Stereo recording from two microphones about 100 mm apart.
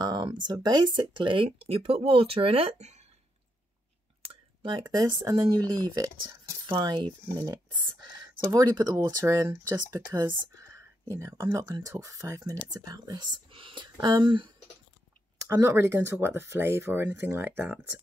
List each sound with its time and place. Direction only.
0.0 s speech: 45° right (ahead or behind); by 3.0 s 80° right
4.3 s a sound: 55° right (ahead or behind)
4.8 s speech: 40° right (ahead or behind)
6.7 s speech: 55° right (ahead or behind)
8.5 s speech: 35° right (ahead or behind); by 13.8 s 60° right (ahead or behind)
13.9 s speech: 40° right (ahead or behind)
15.5 s speech: 30° right (ahead or behind)